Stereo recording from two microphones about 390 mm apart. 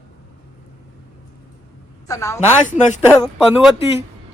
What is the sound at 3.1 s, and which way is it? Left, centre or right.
Speech, centre.